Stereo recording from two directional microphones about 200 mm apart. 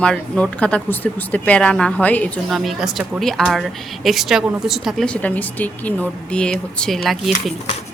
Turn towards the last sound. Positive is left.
turn(degrees=0)  # may be behind; listen again after turning